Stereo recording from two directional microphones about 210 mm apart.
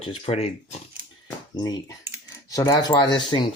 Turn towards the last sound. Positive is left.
turn(degrees=20)  # may be behind; listen again after turning